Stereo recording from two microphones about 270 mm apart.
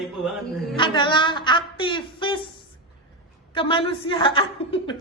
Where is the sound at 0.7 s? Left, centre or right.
Centre.